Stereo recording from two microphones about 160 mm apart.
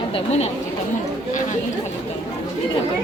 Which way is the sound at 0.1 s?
40° left (ahead or behind).